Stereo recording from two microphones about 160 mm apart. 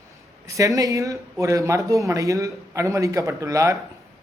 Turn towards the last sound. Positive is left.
turn(degrees=-20)  # may be behind; listen again after turning